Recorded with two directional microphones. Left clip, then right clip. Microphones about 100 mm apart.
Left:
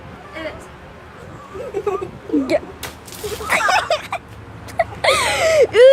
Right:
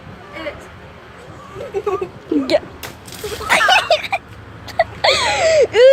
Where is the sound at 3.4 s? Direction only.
15° right (ahead or behind).